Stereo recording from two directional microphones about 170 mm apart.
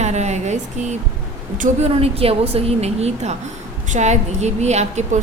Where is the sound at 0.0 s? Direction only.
40° right (ahead or behind).